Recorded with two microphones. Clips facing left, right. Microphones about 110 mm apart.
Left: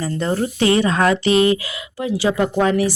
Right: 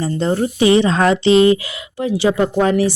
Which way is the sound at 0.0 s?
30° right (ahead or behind).